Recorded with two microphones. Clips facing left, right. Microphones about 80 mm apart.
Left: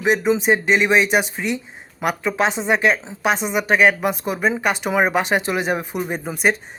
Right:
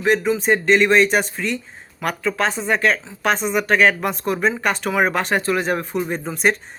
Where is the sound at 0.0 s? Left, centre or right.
Centre.